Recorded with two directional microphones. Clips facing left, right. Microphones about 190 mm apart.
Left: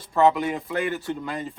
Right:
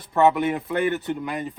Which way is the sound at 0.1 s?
25° right (ahead or behind).